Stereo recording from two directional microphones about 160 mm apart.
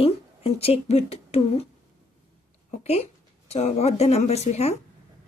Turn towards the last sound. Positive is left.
turn(degrees=40)  # may be behind; listen again after turning